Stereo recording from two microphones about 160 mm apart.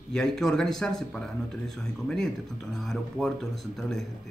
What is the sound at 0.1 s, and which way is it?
Speech, 5° left (ahead or behind).